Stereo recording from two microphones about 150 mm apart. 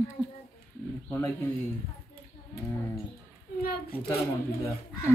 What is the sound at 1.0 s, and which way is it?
Speech, 10° left (ahead or behind).